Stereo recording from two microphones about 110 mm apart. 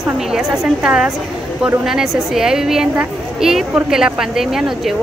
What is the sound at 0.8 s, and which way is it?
A woman's voice, 10° right (ahead or behind).